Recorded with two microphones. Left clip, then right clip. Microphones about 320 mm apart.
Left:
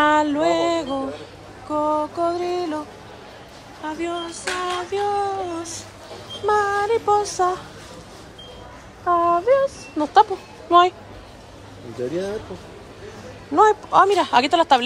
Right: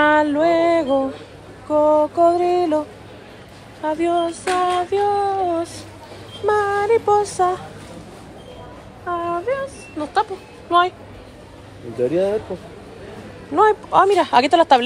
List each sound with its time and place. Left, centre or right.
0.0 s a sound: centre
1.7 s speech: centre
3.8 s child singing: centre
9.0 s speech: centre
13.6 s speech: centre